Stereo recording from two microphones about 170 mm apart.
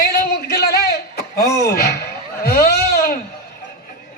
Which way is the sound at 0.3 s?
70° left (ahead or behind).